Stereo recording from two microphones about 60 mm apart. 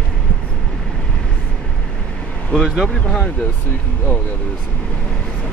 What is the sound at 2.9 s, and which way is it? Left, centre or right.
Speech, centre.